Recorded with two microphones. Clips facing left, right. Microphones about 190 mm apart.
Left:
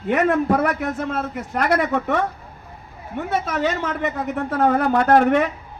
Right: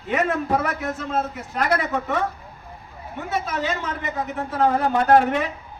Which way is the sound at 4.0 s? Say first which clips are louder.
Left 4 dB; 60° left (ahead or behind).